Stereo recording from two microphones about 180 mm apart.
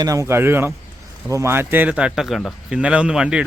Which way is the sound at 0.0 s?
20° right (ahead or behind).